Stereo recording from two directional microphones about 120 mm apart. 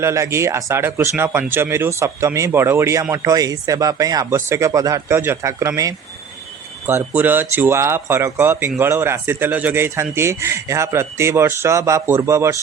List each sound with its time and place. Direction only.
0.0 s speech: 25° right (ahead or behind)
6.8 s speech: 15° right (ahead or behind)